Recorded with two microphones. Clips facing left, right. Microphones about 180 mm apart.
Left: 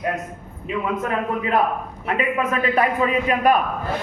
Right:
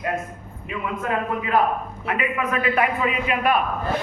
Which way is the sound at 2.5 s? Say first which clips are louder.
Right 1 dB; 40° left (ahead or behind).